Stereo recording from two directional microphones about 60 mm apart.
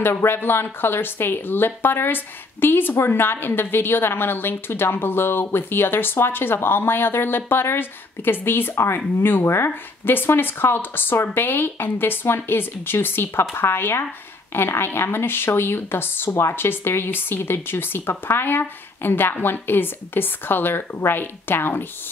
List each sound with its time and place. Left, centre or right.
0.0 s speech: left